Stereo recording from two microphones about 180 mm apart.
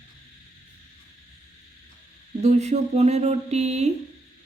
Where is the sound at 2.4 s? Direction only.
40° right (ahead or behind).